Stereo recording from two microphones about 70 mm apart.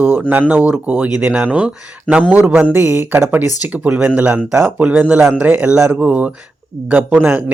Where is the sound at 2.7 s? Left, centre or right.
Right.